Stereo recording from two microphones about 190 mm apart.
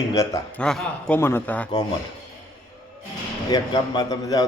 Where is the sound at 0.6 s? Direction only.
5° left (ahead or behind).